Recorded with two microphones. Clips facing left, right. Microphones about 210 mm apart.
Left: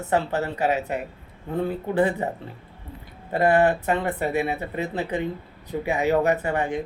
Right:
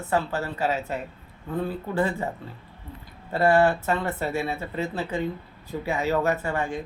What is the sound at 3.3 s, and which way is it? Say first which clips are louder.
Speech: left 1 dB; 20° left (ahead or behind).